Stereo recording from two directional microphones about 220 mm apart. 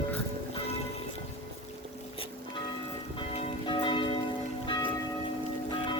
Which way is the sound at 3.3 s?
25° left (ahead or behind).